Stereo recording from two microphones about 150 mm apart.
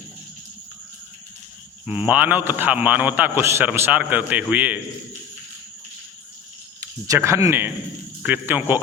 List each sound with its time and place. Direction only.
1.9 s a man's voice: 10° right (ahead or behind)
6.7 s a man's voice: 20° right (ahead or behind)